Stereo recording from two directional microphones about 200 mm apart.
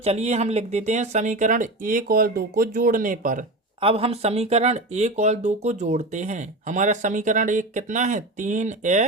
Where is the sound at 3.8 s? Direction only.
30° right (ahead or behind).